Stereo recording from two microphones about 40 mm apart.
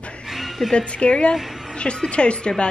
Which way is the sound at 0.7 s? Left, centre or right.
Left.